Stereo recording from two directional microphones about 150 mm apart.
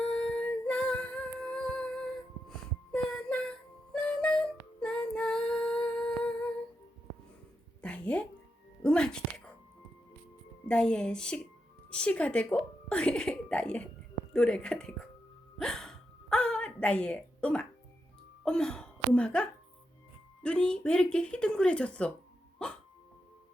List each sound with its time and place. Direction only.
0.0 s music: 5° left (ahead or behind)
2.5 s a sound: 5° left (ahead or behind)
3.9 s music: 5° left (ahead or behind)
7.8 s a sound: 10° left (ahead or behind)
8.8 s music: 5° left (ahead or behind)
10.7 s a woman's voice: 5° left (ahead or behind)
15.5 s hiccup: 5° left (ahead or behind)
18.4 s throat clearing: 5° left (ahead or behind)
20.4 s speech: 5° left (ahead or behind)